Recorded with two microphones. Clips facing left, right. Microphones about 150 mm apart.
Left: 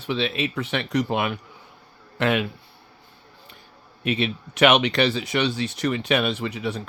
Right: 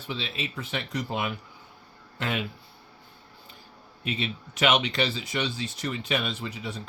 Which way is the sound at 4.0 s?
70° left (ahead or behind).